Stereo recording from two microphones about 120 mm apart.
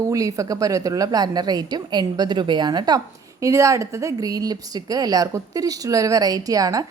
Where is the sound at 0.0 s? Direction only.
30° right (ahead or behind).